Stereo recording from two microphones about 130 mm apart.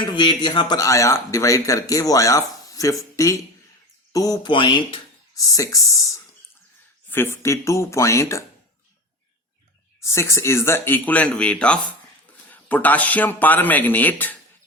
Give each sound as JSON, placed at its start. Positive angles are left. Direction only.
{"t": 0.0, "sound": "speech", "side_deg": 35}
{"t": 4.4, "sound": "speech", "side_deg": 40}
{"t": 5.3, "sound": "speech", "side_deg": 25}
{"t": 7.1, "sound": "speech", "side_deg": 20}
{"t": 10.0, "sound": "speech", "side_deg": 20}